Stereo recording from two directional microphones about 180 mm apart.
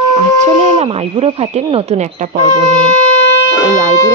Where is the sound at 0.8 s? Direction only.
35° right (ahead or behind).